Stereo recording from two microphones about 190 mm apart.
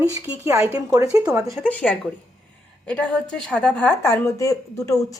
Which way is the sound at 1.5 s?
5° left (ahead or behind).